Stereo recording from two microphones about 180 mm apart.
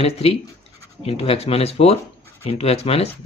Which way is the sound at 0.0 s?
35° left (ahead or behind).